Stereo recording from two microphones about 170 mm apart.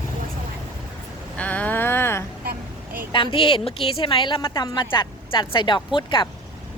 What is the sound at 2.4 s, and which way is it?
Vehicle, 60° right (ahead or behind).